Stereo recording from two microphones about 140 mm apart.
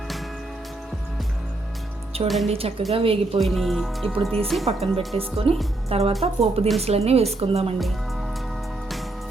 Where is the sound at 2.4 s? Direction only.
45° right (ahead or behind).